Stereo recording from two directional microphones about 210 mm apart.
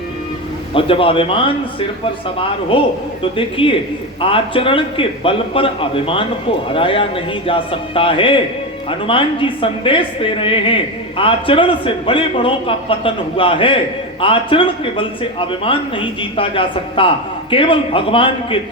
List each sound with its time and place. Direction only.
0.7 s a man's voice: 25° left (ahead or behind)
2.7 s a man's voice: 25° left (ahead or behind)